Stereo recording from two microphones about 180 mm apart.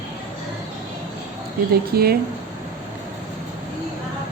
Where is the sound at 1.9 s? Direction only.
60° right (ahead or behind).